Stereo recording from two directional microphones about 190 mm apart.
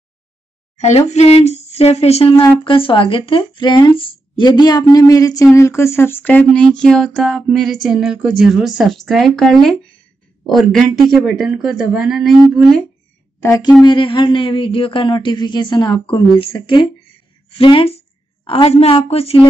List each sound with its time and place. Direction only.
0.7 s speech: 35° left (ahead or behind); by 12.8 s centre (ahead or behind)
13.4 s a woman's voice: 20° left (ahead or behind)